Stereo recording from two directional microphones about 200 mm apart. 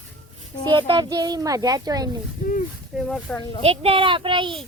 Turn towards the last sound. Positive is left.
turn(degrees=-25)  # may be behind; listen again after turning